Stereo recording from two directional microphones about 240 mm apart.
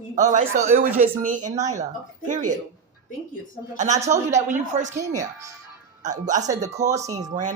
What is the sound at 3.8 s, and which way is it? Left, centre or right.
A woman's voice, right.